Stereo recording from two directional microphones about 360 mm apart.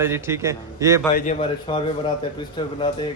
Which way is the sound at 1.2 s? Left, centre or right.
Centre.